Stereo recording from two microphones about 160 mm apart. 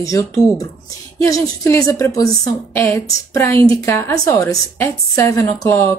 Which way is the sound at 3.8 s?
15° left (ahead or behind).